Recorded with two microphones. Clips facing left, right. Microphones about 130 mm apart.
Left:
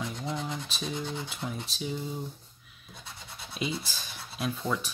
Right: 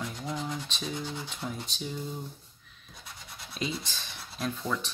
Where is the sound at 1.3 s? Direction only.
Centre (ahead or behind).